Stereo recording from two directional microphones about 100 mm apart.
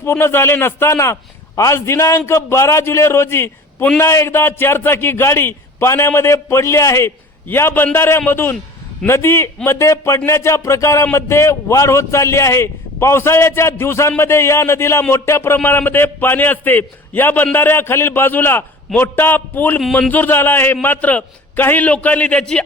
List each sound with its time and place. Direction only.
0.0 s a man's voice: 25° left (ahead or behind)